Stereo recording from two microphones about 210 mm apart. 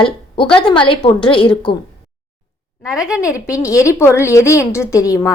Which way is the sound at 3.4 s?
15° left (ahead or behind).